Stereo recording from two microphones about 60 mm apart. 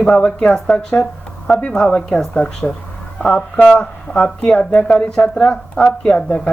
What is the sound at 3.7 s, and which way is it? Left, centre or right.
Speech, centre.